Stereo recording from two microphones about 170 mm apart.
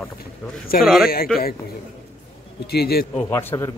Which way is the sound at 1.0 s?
60° left (ahead or behind).